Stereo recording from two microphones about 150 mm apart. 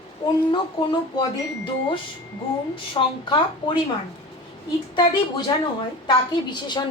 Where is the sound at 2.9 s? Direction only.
30° left (ahead or behind).